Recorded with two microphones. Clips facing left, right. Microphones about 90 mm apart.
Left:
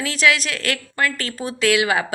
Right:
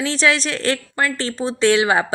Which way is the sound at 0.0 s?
30° right (ahead or behind).